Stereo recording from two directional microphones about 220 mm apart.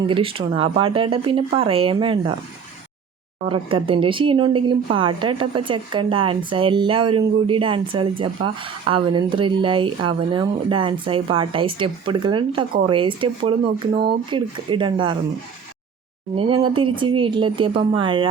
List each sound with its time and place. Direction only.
0.1 s a woman's voice: 25° right (ahead or behind)
3.5 s a woman's voice: 25° right (ahead or behind)
16.3 s a woman's voice: 25° right (ahead or behind)